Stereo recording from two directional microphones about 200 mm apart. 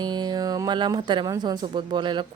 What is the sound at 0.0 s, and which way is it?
Speech, 20° right (ahead or behind).